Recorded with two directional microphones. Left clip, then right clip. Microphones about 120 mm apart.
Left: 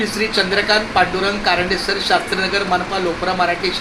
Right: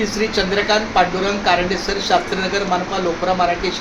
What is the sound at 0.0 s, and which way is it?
Speech, 15° left (ahead or behind).